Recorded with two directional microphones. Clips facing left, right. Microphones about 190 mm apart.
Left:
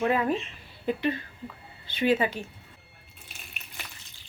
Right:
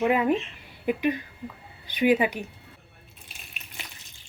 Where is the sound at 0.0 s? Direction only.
15° right (ahead or behind).